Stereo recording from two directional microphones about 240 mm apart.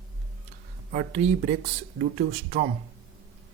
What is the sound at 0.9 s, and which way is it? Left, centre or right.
Speech, right.